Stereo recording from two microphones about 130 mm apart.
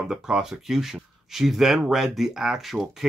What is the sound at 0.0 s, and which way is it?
Speech, 5° right (ahead or behind).